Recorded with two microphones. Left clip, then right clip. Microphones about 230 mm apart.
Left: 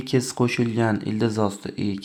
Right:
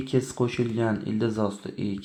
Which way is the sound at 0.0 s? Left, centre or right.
Left.